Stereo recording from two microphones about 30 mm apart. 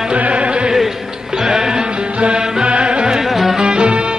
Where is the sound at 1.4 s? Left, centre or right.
Right.